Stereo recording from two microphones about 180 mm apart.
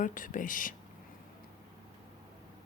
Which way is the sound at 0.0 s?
45° left (ahead or behind).